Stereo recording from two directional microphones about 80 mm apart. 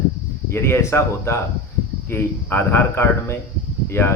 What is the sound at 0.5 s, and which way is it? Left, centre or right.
A man's voice, left.